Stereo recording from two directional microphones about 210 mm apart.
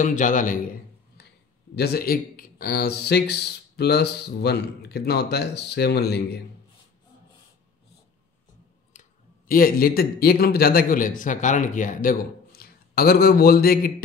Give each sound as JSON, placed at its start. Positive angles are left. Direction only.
{"t": 0.0, "sound": "a man's voice", "side_deg": 35}
{"t": 1.8, "sound": "speech", "side_deg": 45}
{"t": 9.5, "sound": "speech", "side_deg": 45}